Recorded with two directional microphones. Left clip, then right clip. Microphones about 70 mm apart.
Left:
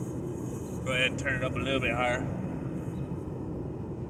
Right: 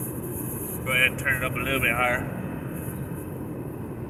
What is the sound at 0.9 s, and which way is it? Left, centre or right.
Vehicle, left.